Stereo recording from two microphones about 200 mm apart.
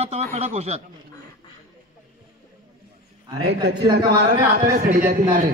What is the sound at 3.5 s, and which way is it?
A man's voice, 55° right (ahead or behind).